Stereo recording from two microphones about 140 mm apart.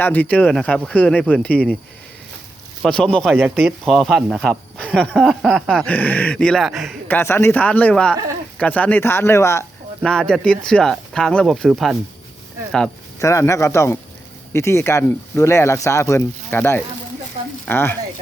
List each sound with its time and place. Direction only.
0.0 s speech: 10° left (ahead or behind)
2.8 s speech: 5° left (ahead or behind)
3.3 s speech: 15° right (ahead or behind)
3.8 s speech: centre (ahead or behind)
7.1 s speech: 15° left (ahead or behind)
10.0 s speech: 5° left (ahead or behind)
13.1 s speech: 20° left (ahead or behind)